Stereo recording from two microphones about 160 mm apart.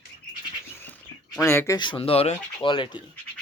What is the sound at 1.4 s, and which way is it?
Speech, 15° left (ahead or behind).